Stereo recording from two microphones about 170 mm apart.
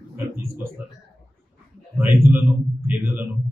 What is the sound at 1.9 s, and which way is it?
A man's voice, 15° right (ahead or behind).